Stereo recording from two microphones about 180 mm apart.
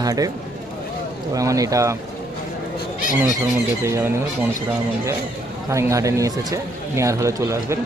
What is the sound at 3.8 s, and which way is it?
Speech, 15° right (ahead or behind).